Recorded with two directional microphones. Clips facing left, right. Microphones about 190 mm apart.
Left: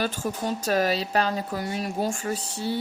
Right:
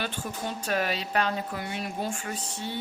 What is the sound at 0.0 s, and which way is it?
Speech, 40° left (ahead or behind).